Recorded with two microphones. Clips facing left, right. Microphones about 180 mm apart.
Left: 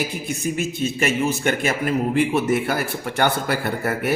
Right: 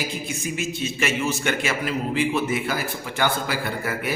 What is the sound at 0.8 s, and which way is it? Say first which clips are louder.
A man's voice: left 4 dB; 45° left (ahead or behind).